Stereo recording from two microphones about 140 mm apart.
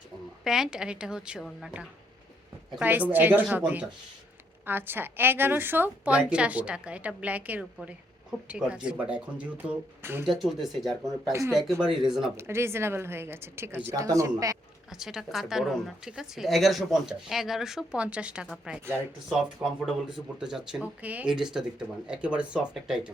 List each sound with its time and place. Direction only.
0.4 s a woman's voice: 5° right (ahead or behind)
4.6 s a woman's voice: 15° right (ahead or behind)
10.2 s a woman's voice: centre (ahead or behind)
11.3 s speech: 20° right (ahead or behind)
11.9 s a woman's voice: 5° right (ahead or behind)
12.4 s a woman's voice: 20° right (ahead or behind)
14.8 s a woman's voice: 5° right (ahead or behind)